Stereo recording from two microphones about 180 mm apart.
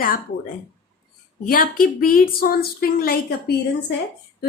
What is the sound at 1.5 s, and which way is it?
Speech, 50° left (ahead or behind).